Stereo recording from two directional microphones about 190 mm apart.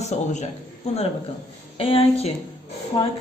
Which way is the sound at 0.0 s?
35° left (ahead or behind).